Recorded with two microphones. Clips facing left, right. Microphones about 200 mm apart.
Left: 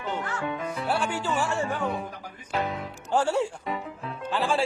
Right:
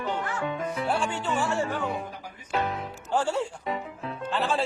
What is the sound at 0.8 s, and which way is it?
Speech, 5° left (ahead or behind).